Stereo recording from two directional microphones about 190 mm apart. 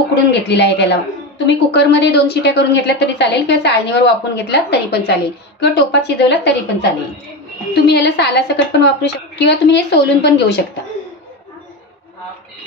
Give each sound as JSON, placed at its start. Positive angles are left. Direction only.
{"t": 0.1, "sound": "a woman's voice", "side_deg": 65}